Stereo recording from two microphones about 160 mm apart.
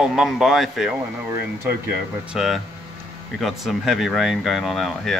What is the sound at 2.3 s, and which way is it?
Speech, centre (ahead or behind).